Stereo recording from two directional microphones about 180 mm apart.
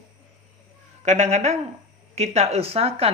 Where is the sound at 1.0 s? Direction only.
40° right (ahead or behind).